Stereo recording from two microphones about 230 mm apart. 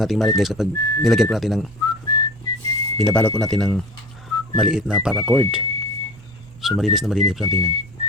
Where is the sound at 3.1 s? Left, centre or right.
Centre.